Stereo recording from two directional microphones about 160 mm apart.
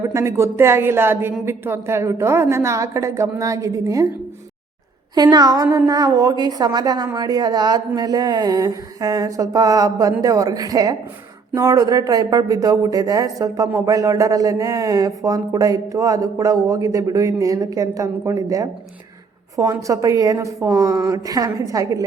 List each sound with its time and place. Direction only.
0.0 s a woman's voice: 20° right (ahead or behind)
5.1 s a woman's voice: 25° right (ahead or behind)